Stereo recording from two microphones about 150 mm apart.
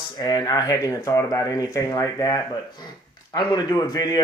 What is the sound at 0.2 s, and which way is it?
A man's voice, 25° left (ahead or behind).